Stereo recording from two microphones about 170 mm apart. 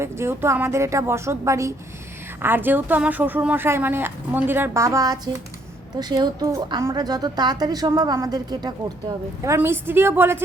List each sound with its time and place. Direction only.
0.0 s a woman's voice: 15° right (ahead or behind)